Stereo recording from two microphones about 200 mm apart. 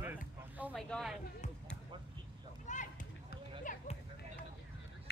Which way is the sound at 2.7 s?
35° left (ahead or behind).